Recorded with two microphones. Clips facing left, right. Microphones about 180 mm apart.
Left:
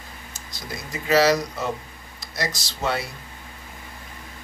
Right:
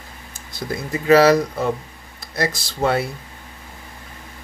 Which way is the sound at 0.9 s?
55° right (ahead or behind).